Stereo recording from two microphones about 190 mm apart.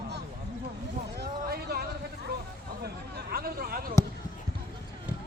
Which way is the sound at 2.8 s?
55° right (ahead or behind).